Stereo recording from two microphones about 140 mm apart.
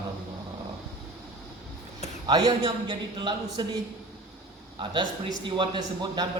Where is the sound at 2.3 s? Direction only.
30° right (ahead or behind).